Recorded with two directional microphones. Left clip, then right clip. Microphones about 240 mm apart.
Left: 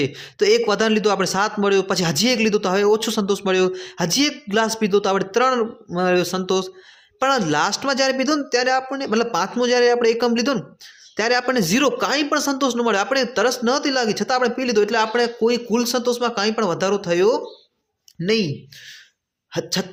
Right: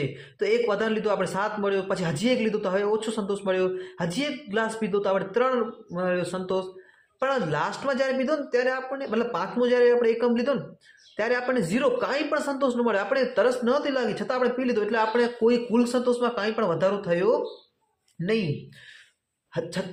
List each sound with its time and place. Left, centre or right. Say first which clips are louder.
0.0 s a man's voice: left 9 dB; left